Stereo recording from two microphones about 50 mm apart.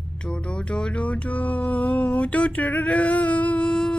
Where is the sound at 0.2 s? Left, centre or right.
Centre.